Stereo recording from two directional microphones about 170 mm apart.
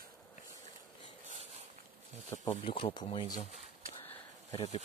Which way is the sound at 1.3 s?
40° right (ahead or behind).